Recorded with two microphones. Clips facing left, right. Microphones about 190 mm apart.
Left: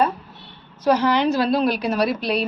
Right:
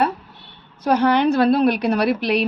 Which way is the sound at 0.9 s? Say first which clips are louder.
Right 7 dB; 55° right (ahead or behind).